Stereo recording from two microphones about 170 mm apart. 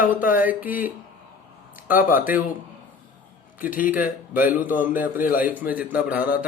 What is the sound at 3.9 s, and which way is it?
A man's voice, 10° right (ahead or behind).